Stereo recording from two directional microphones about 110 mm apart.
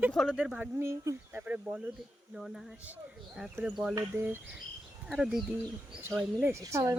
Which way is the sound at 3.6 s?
5° right (ahead or behind).